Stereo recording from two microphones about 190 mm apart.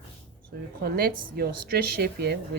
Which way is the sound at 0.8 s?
50° right (ahead or behind).